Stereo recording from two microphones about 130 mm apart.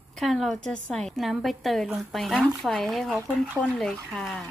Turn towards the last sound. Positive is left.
turn(degrees=5)  # may be behind; listen again after turning